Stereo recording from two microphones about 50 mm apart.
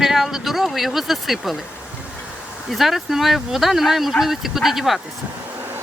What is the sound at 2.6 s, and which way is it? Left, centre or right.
Speech, centre.